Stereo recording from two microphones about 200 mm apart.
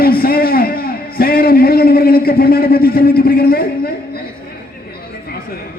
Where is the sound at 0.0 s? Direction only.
50° left (ahead or behind).